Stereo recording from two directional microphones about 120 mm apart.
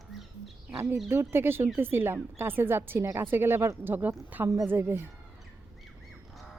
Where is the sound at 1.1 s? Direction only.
20° right (ahead or behind).